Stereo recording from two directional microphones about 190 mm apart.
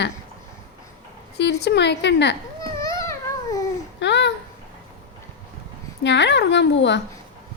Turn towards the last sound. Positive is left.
turn(degrees=65)  # may be behind; listen again after turning